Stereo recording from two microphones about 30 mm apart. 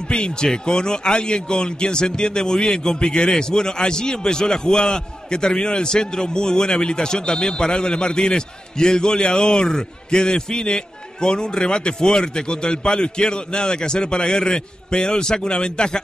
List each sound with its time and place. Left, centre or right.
0.1 s a man's voice: left